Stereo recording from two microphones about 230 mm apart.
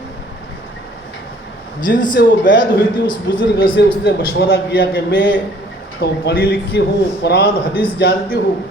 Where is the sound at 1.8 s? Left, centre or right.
Left.